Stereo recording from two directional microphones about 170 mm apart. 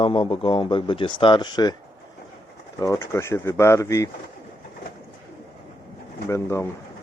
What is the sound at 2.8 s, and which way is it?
Speech, 20° left (ahead or behind).